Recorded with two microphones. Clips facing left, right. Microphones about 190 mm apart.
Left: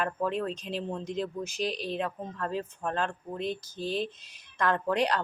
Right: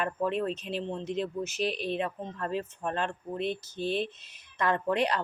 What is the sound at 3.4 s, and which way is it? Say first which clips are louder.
Speech: right 1 dB; 40° left (ahead or behind).